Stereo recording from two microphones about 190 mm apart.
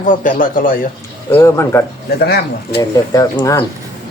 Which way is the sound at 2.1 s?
60° left (ahead or behind).